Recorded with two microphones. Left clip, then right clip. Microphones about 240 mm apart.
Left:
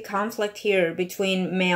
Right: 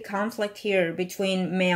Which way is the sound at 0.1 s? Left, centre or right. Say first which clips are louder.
Left 2 dB; right.